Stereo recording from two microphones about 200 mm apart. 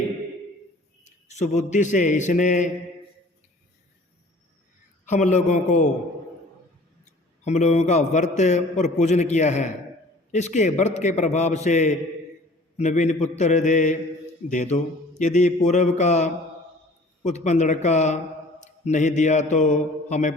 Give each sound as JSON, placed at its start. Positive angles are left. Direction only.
{"t": 1.0, "sound": "a man's voice", "side_deg": 35}
{"t": 5.0, "sound": "a man's voice", "side_deg": 35}
{"t": 7.0, "sound": "a man's voice", "side_deg": 35}